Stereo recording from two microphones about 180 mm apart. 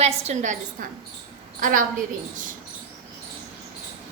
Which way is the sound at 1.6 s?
50° right (ahead or behind).